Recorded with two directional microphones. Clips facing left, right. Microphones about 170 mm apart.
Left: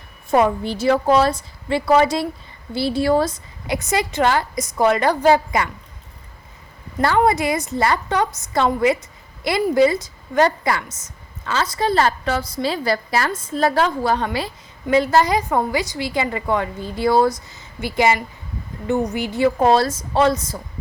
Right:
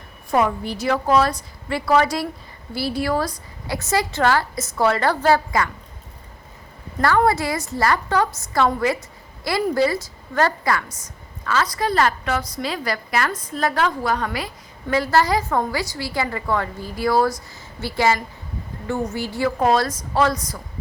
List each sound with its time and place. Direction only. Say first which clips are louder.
0.3 s a woman's voice: left 3 dB; 25° left (ahead or behind)
7.0 s a woman's voice: left 1 dB; 20° left (ahead or behind)